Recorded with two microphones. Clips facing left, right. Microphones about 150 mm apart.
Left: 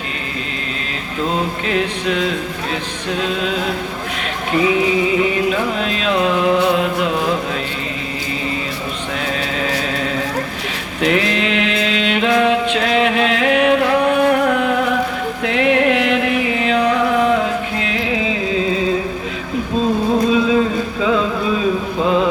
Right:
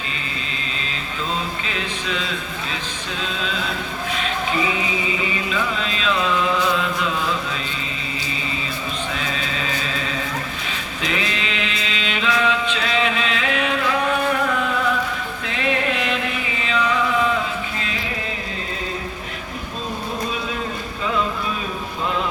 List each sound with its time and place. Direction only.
1.4 s music: 60° left (ahead or behind)
9.2 s chant: 65° left (ahead or behind)
11.0 s mantra: 65° left (ahead or behind)
15.4 s music: 70° left (ahead or behind); by 18.3 s 90° left